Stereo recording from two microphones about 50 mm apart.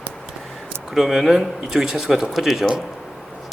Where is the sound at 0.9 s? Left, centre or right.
Centre.